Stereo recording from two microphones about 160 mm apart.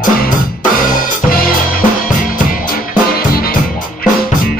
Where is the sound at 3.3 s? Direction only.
65° left (ahead or behind).